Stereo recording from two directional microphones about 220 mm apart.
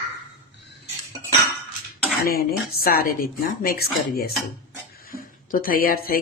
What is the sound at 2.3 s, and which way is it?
Speech, 45° left (ahead or behind).